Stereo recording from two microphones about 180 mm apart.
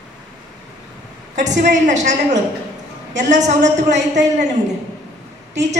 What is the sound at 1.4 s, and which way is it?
A woman's voice, 45° right (ahead or behind).